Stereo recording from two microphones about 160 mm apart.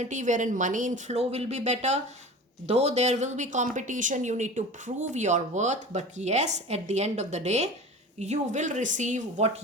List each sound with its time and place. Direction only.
0.0 s speech: 50° right (ahead or behind)